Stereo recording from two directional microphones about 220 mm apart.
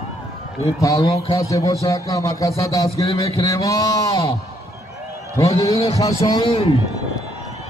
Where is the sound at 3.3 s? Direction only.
15° left (ahead or behind).